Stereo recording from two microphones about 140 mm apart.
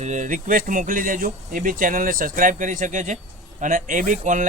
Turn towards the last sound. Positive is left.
turn(degrees=-65)  # may be behind; listen again after turning